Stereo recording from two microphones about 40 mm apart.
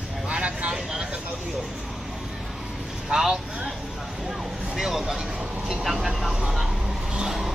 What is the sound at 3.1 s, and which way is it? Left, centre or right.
Vehicle, centre.